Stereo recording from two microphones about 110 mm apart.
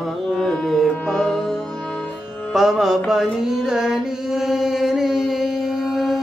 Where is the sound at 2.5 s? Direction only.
Centre (ahead or behind).